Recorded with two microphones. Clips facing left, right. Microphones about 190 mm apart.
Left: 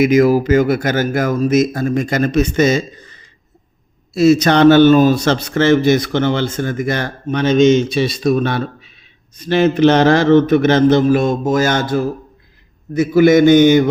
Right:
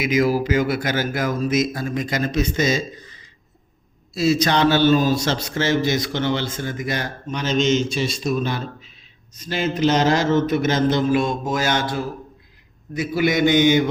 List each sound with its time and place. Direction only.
0.0 s a man's voice: 50° left (ahead or behind)
9.5 s a man's voice: 65° left (ahead or behind); by 13.8 s 50° left (ahead or behind)